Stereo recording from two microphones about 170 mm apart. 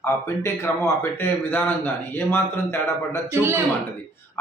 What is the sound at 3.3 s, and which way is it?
Speech, 15° right (ahead or behind).